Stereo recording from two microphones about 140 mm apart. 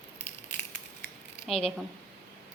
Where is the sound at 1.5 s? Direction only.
Centre (ahead or behind).